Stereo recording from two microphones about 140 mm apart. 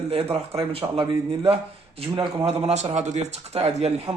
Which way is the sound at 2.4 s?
45° right (ahead or behind).